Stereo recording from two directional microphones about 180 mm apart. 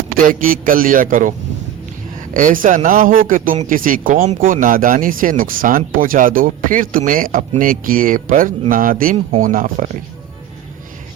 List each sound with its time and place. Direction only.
0.3 s a man's voice: 50° right (ahead or behind)
2.3 s a man's voice: 50° right (ahead or behind)